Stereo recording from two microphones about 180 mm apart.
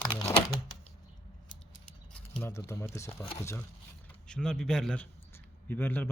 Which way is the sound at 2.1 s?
15° left (ahead or behind).